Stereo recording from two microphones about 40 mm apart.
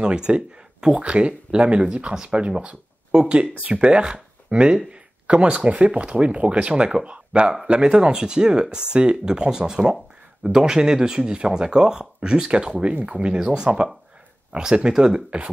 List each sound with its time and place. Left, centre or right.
0.0 s speech: right